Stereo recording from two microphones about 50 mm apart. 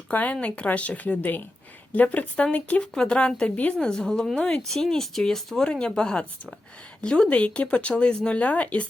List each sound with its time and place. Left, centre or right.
0.1 s speech: left
2.9 s speech: centre
3.5 s speech: left
3.8 s speech: centre